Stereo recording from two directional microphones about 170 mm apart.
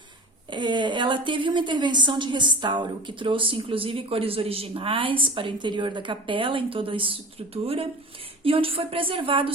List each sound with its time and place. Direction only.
0.5 s a woman's voice: 25° right (ahead or behind)